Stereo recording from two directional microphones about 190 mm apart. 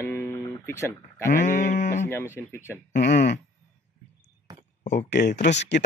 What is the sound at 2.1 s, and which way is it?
Speech, 10° left (ahead or behind).